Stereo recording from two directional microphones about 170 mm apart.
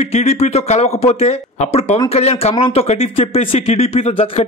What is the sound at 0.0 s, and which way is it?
A man's voice, 40° left (ahead or behind).